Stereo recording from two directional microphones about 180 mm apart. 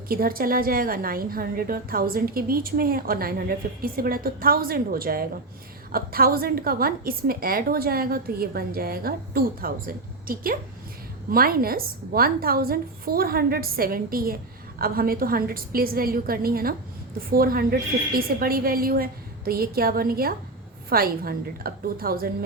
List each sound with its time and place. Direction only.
0.1 s a woman's voice: 55° right (ahead or behind)